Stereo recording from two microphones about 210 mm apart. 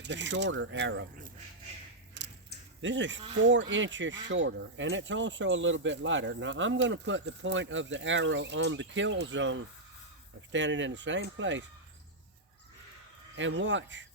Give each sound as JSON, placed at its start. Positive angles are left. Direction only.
{"t": 0.0, "sound": "speech", "side_deg": -55}
{"t": 2.2, "sound": "a sound", "side_deg": -60}
{"t": 2.8, "sound": "speech", "side_deg": -60}
{"t": 13.3, "sound": "speech", "side_deg": -60}